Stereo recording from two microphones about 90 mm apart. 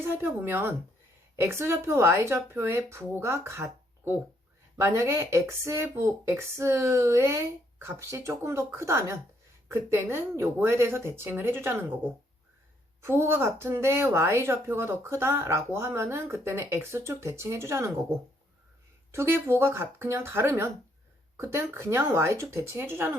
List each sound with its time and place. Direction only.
0.0 s speech: 25° right (ahead or behind)
13.0 s speech: 30° right (ahead or behind)
19.1 s speech: 30° right (ahead or behind)